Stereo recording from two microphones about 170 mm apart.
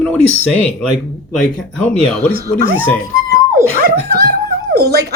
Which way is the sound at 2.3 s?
60° right (ahead or behind).